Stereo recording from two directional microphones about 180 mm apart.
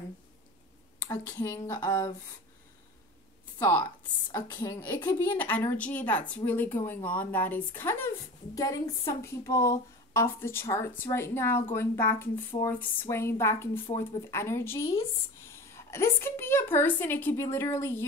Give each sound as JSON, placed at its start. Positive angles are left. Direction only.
{"t": 1.1, "sound": "a woman's voice", "side_deg": 15}
{"t": 3.5, "sound": "a woman's voice", "side_deg": 15}